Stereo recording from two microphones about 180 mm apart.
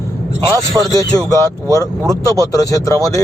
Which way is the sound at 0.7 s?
15° right (ahead or behind).